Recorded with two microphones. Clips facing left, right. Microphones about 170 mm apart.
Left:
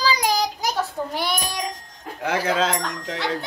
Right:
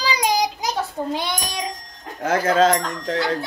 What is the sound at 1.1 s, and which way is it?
Speech, 20° right (ahead or behind).